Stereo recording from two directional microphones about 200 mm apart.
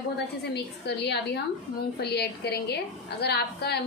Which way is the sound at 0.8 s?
55° left (ahead or behind).